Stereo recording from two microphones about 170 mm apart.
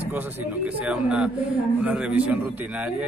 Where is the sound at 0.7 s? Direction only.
5° right (ahead or behind).